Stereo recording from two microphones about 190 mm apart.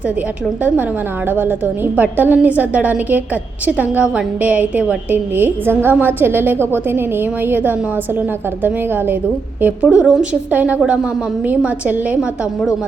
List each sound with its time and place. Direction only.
1.3 s a woman's voice: 10° right (ahead or behind)
9.6 s a woman's voice: 5° right (ahead or behind)